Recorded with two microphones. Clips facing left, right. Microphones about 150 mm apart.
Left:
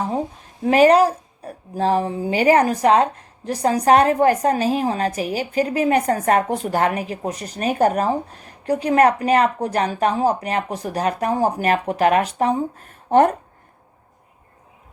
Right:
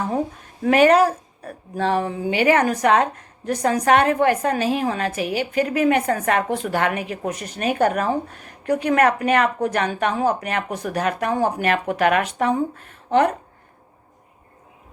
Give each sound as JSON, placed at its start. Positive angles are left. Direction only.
{"t": 0.6, "sound": "a woman's voice", "side_deg": 35}